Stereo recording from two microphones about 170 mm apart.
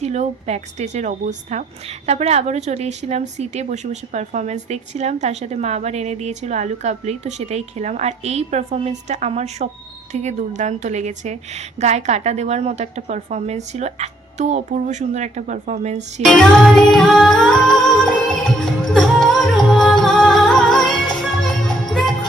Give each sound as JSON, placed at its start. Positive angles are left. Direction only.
{"t": 0.0, "sound": "a woman's voice", "side_deg": -40}
{"t": 16.2, "sound": "music", "side_deg": 0}